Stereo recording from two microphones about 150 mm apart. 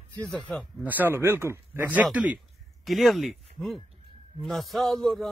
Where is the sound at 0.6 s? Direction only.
10° right (ahead or behind).